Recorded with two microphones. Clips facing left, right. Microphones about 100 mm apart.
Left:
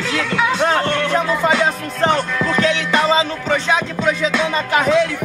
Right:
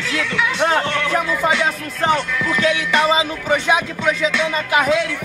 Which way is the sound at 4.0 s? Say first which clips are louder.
Left 1 dB; 35° left (ahead or behind).